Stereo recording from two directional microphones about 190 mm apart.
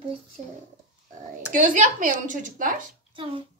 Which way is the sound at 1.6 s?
45° right (ahead or behind).